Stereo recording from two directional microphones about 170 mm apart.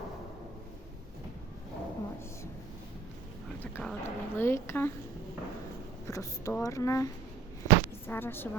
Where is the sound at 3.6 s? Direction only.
10° left (ahead or behind).